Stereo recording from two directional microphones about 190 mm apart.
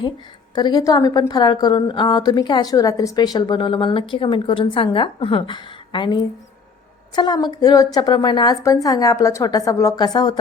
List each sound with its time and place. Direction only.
0.5 s a woman's voice: 20° left (ahead or behind)
7.2 s a woman's voice: 20° left (ahead or behind)